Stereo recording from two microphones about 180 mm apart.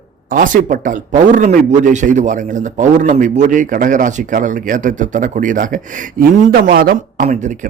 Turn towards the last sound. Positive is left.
turn(degrees=-45)  # may be behind; listen again after turning